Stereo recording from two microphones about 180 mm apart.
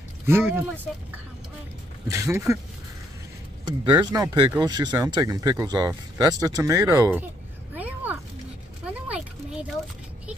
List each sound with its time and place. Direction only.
0.3 s speech: 10° right (ahead or behind)
2.0 s speech: 15° right (ahead or behind)
3.6 s speech: 25° right (ahead or behind)
7.7 s a sound: 10° right (ahead or behind)